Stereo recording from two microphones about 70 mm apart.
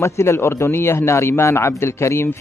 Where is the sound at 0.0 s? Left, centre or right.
Left.